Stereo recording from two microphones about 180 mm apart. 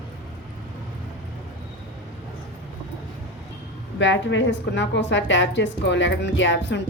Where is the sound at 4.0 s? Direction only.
90° left.